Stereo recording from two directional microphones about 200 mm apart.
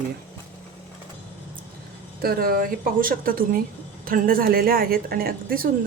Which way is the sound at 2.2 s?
45° right (ahead or behind).